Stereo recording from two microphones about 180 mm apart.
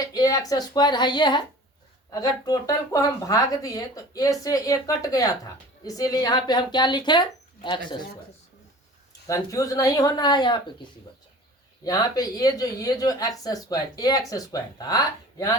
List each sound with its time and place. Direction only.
0.0 s a woman's voice: 20° left (ahead or behind)
9.2 s a woman's voice: 20° left (ahead or behind)
11.8 s a woman's voice: 20° left (ahead or behind)